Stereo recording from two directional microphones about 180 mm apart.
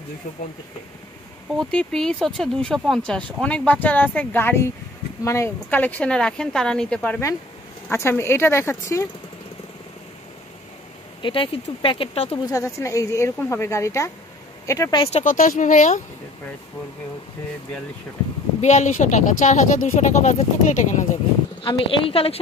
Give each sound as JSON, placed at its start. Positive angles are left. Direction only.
{"t": 1.6, "sound": "speech", "side_deg": 5}
{"t": 11.2, "sound": "speech", "side_deg": 30}
{"t": 12.4, "sound": "speech", "side_deg": 20}
{"t": 15.2, "sound": "speech", "side_deg": 45}
{"t": 18.6, "sound": "speech", "side_deg": 40}
{"t": 21.6, "sound": "a woman's voice", "side_deg": 30}